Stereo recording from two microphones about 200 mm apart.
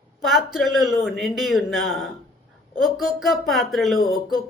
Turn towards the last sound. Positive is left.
turn(degrees=45)  # may be behind; listen again after turning